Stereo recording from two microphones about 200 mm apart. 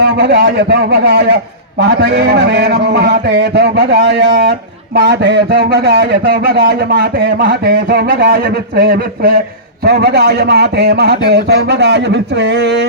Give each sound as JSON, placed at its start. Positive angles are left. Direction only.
{"t": 0.2, "sound": "a man's voice", "side_deg": -60}